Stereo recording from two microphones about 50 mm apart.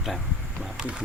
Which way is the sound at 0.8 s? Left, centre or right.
Centre.